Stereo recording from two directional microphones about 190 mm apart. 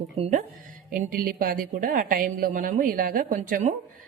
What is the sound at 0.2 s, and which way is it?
A woman's voice, 40° right (ahead or behind).